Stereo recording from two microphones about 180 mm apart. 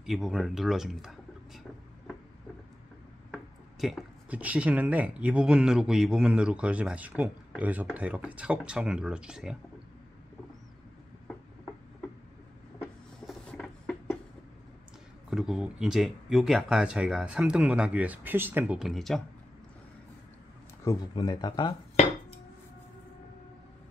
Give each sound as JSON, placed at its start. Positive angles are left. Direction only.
{"t": 0.0, "sound": "speech", "side_deg": 0}
{"t": 3.8, "sound": "speech", "side_deg": -5}
{"t": 13.3, "sound": "a sound", "side_deg": 5}
{"t": 15.2, "sound": "speech", "side_deg": -5}
{"t": 20.8, "sound": "speech", "side_deg": 20}